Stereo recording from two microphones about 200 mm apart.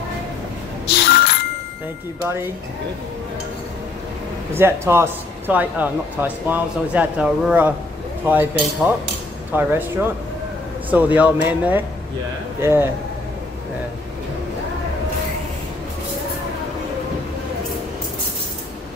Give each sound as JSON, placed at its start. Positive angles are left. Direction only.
{"t": 0.8, "sound": "telephone bell ringing", "side_deg": 55}
{"t": 4.6, "sound": "speech", "side_deg": -10}